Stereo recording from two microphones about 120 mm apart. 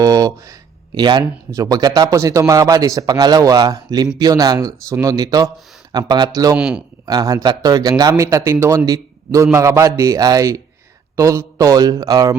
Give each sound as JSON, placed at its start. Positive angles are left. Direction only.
{"t": 0.0, "sound": "a man's voice", "side_deg": -30}
{"t": 6.6, "sound": "speech", "side_deg": -10}
{"t": 7.0, "sound": "a man's voice", "side_deg": -35}